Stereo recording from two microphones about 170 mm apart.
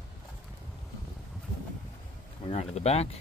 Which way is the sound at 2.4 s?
40° left (ahead or behind).